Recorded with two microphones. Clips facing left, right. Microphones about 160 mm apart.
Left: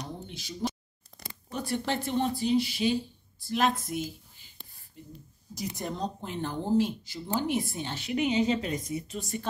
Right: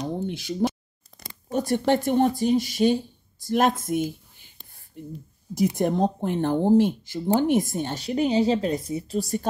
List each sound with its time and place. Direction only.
0.0 s a sound: 55° right (ahead or behind)
1.5 s speech: 45° right (ahead or behind)
5.5 s speech: 55° right (ahead or behind); by 9.5 s 40° right (ahead or behind)